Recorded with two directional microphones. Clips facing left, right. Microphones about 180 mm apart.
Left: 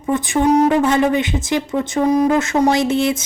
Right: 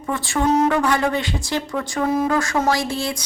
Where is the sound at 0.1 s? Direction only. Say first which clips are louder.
Left 5 dB; 20° left (ahead or behind).